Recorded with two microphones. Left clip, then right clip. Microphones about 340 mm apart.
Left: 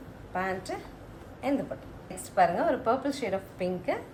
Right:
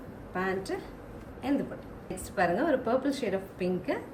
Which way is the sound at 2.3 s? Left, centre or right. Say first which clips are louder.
Left 2 dB; left.